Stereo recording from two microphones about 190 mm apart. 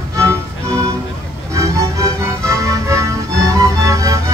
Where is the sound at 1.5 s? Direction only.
15° right (ahead or behind).